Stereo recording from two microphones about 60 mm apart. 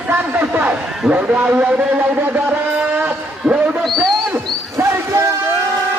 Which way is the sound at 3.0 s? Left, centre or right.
Right.